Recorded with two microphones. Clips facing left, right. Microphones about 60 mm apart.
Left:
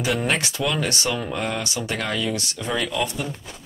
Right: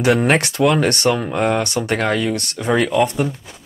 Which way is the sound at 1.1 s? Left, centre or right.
Right.